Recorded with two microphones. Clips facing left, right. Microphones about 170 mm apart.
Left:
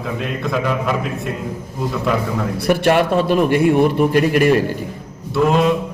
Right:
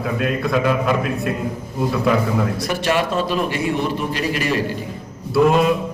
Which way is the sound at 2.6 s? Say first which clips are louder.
Left 5 dB; 60° left (ahead or behind).